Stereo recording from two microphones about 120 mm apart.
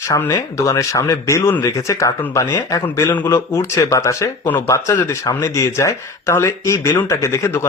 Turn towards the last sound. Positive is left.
turn(degrees=20)  # may be behind; listen again after turning